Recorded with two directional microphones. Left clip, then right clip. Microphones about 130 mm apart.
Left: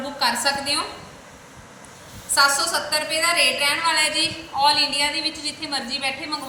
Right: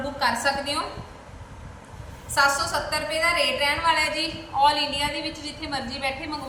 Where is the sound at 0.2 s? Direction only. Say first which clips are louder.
Left 2 dB; 20° right (ahead or behind).